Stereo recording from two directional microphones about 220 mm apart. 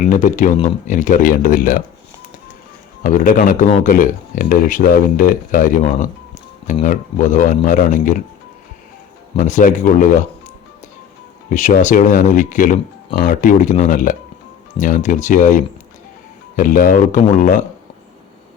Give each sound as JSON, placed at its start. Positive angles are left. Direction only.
{"t": 0.0, "sound": "speech", "side_deg": 35}
{"t": 3.0, "sound": "speech", "side_deg": 35}
{"t": 9.4, "sound": "speech", "side_deg": 35}
{"t": 11.4, "sound": "speech", "side_deg": 35}